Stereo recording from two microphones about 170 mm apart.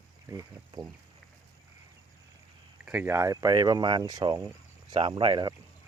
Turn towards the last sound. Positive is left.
turn(degrees=-30)  # may be behind; listen again after turning